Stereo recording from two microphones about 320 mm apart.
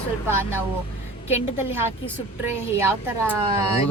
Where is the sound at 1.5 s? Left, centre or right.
Centre.